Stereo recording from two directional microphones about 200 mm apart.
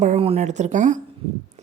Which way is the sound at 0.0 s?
30° right (ahead or behind).